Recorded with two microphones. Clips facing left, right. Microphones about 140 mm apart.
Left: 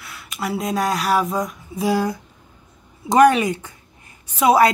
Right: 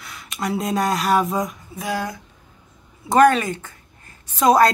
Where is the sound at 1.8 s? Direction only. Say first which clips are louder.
Left 6 dB; 30° left (ahead or behind).